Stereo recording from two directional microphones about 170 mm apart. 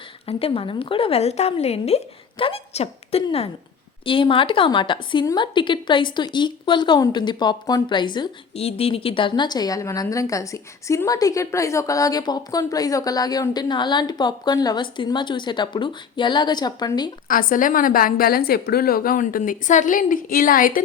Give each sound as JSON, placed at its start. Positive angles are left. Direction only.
{"t": 0.3, "sound": "a woman's voice", "side_deg": 35}
{"t": 17.2, "sound": "a woman's voice", "side_deg": 55}